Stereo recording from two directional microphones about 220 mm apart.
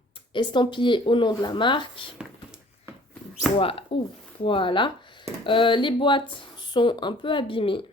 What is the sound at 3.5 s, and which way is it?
Speech, 25° left (ahead or behind).